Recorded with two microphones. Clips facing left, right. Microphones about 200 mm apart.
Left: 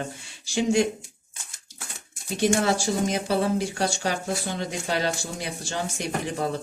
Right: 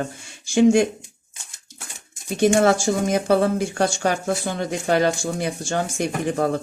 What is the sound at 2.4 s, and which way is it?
Speech, 55° right (ahead or behind).